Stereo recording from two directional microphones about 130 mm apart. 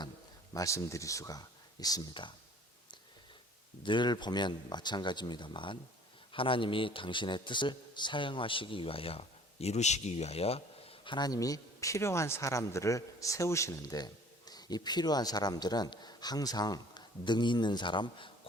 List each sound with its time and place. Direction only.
0.5 s speech: 25° left (ahead or behind)
3.8 s speech: 35° left (ahead or behind)